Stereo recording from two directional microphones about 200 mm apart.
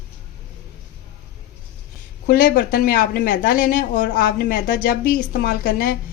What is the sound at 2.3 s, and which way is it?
Speech, 45° left (ahead or behind).